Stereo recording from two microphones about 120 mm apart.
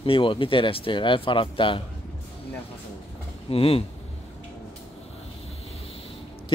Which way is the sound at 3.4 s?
55° left (ahead or behind).